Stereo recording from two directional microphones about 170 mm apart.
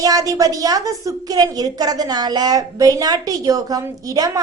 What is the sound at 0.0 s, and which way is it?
A woman's voice, 20° right (ahead or behind).